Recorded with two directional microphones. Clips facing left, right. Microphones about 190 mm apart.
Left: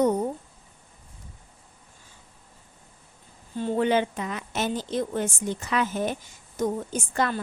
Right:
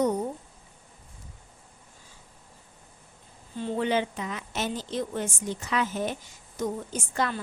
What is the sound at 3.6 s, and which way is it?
A woman's voice, 55° left (ahead or behind).